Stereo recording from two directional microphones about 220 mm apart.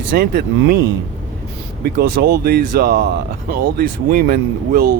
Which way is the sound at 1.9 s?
40° right (ahead or behind).